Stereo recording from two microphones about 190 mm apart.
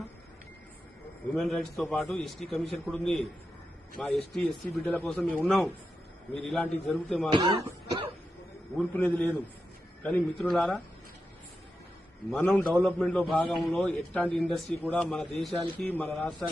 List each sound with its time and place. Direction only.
1.3 s a man's voice: centre (ahead or behind)
7.3 s speech: 25° right (ahead or behind)
8.8 s a man's voice: 5° left (ahead or behind)
12.3 s a man's voice: 5° left (ahead or behind)